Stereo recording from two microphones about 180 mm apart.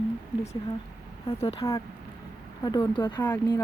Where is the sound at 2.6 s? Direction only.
25° left (ahead or behind).